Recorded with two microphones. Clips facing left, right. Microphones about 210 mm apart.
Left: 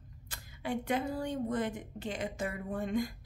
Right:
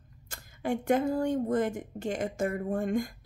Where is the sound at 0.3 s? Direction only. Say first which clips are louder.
Right 5 dB; 45° right (ahead or behind).